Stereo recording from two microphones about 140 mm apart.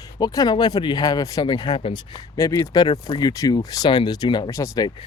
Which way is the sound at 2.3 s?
20° left (ahead or behind).